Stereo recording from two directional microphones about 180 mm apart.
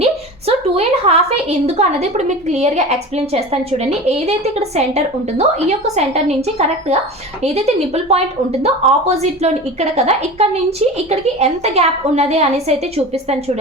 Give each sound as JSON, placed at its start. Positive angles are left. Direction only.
{"t": 0.0, "sound": "a woman's voice", "side_deg": -35}